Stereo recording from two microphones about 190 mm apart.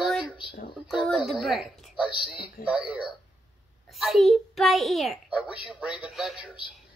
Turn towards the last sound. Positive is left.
turn(degrees=0)  # may be behind; listen again after turning